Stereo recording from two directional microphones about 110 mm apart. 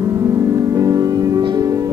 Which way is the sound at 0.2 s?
30° right (ahead or behind).